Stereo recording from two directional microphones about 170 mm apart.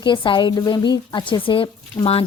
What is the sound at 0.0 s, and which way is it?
A woman's voice, 30° left (ahead or behind).